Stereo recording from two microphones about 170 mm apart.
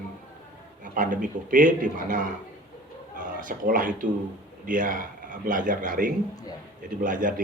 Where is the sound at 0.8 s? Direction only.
50° right (ahead or behind).